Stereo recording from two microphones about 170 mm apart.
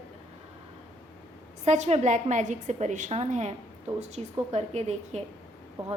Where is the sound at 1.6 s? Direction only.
40° right (ahead or behind).